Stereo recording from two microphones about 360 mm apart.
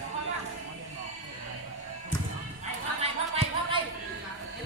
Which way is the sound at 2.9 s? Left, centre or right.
Centre.